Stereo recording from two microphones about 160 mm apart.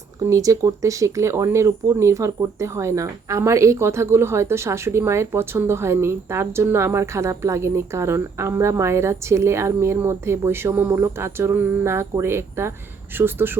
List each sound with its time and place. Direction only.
0.2 s speech: 20° right (ahead or behind)